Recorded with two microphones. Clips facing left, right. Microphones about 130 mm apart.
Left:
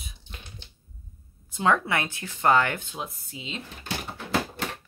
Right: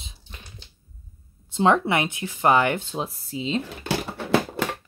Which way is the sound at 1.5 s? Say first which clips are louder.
Right 4 dB; 25° right (ahead or behind).